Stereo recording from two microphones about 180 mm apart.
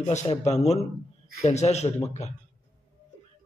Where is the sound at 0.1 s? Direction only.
40° left (ahead or behind).